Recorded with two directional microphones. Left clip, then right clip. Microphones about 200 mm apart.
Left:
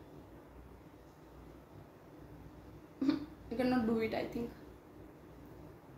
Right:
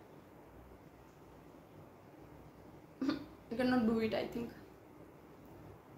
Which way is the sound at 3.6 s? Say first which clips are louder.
Even; 15° right (ahead or behind).